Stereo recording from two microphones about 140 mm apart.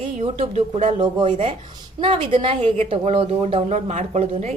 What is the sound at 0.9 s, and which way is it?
A woman's voice, 35° right (ahead or behind).